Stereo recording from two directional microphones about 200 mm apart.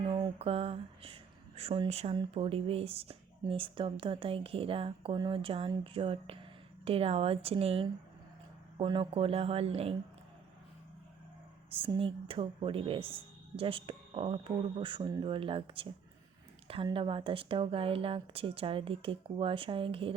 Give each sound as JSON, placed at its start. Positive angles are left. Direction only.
{"t": 0.0, "sound": "speech", "side_deg": -25}
{"t": 11.7, "sound": "speech", "side_deg": -25}